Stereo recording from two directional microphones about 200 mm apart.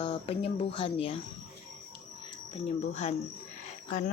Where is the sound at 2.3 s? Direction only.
30° left (ahead or behind).